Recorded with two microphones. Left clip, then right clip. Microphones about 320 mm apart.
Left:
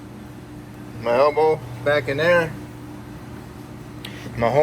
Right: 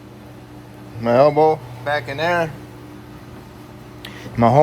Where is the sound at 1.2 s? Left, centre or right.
Right.